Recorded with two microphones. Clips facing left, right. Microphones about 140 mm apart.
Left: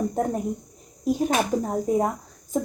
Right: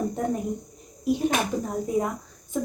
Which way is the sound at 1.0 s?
40° left (ahead or behind).